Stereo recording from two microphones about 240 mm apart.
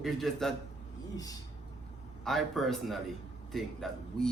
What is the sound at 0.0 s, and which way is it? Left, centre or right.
Speech, centre.